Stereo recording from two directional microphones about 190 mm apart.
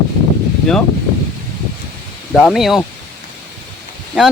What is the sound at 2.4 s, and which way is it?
Speech, centre (ahead or behind).